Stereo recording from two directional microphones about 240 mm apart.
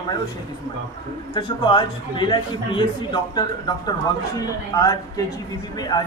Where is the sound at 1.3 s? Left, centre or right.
Left.